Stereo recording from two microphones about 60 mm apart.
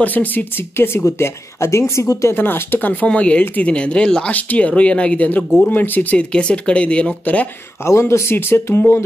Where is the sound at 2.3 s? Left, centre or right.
Left; by 4.3 s centre.